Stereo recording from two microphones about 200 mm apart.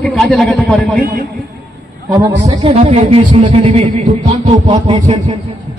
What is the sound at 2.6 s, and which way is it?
Speech, 35° right (ahead or behind).